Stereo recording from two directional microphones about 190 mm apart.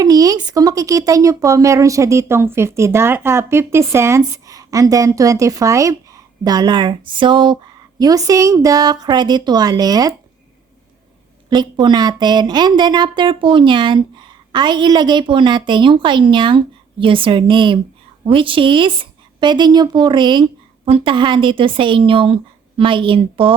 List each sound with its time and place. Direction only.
0.0 s a woman's voice: 20° right (ahead or behind)
11.4 s a woman's voice: 20° right (ahead or behind)